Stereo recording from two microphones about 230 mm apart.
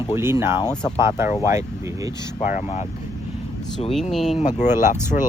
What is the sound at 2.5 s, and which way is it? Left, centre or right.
Speech, left.